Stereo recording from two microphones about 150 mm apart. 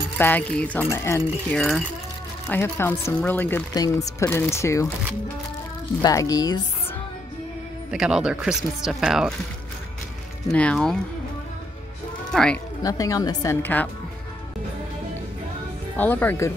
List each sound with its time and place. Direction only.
0.2 s speech: 10° left (ahead or behind)
1.5 s speech: 5° left (ahead or behind)
2.4 s speech: 15° left (ahead or behind)
3.7 s speech: 25° left (ahead or behind)
6.0 s speech: 25° left (ahead or behind)
7.9 s speech: 5° right (ahead or behind)
10.5 s speech: 5° left (ahead or behind)
12.3 s speech: 5° left (ahead or behind)
12.8 s speech: 25° left (ahead or behind)
16.0 s speech: 10° left (ahead or behind)